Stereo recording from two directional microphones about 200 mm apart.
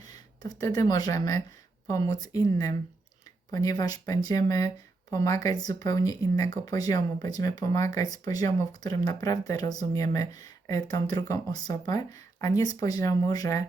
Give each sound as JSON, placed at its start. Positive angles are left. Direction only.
{"t": 0.0, "sound": "speech", "side_deg": 20}